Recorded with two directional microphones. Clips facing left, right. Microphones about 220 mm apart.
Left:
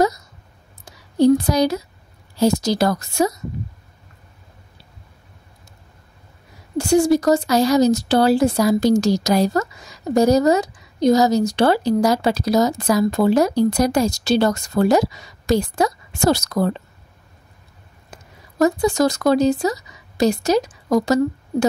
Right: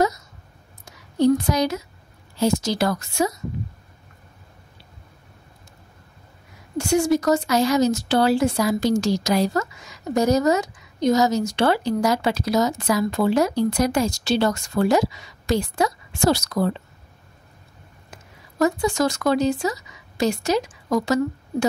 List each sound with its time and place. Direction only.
0.8 s a woman's voice: 35° left (ahead or behind)
6.8 s speech: 35° left (ahead or behind)
18.1 s speech: 40° left (ahead or behind)